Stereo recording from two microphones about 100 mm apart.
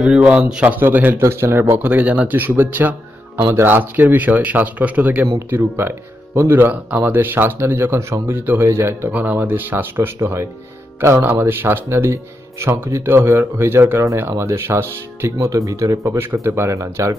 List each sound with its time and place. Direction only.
0.0 s a man's voice: 10° right (ahead or behind); by 17.1 s 30° right (ahead or behind)